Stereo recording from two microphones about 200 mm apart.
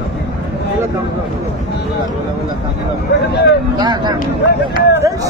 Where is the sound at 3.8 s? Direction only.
20° right (ahead or behind).